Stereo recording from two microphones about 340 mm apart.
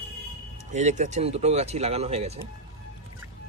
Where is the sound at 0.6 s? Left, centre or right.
Right.